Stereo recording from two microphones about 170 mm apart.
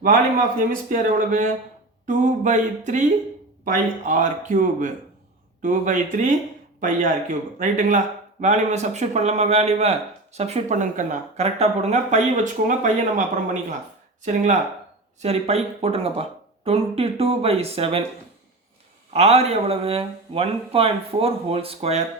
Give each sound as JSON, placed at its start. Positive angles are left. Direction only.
{"t": 0.9, "sound": "speech", "side_deg": -50}
{"t": 19.1, "sound": "speech", "side_deg": -40}